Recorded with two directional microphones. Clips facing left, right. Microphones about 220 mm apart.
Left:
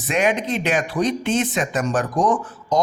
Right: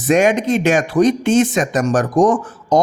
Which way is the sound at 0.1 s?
45° right (ahead or behind).